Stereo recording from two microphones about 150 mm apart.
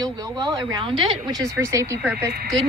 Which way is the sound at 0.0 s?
25° right (ahead or behind).